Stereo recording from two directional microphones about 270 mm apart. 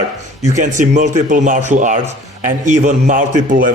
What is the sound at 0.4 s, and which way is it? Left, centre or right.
Speech, right.